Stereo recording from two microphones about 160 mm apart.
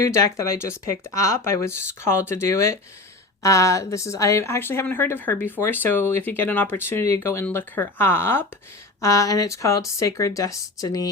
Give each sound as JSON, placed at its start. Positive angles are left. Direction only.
{"t": 0.0, "sound": "speech", "side_deg": 20}